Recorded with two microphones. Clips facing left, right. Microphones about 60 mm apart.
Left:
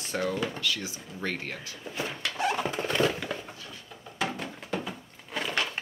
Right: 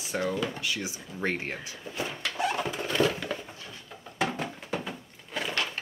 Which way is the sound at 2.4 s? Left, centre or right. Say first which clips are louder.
Left 1 dB; centre.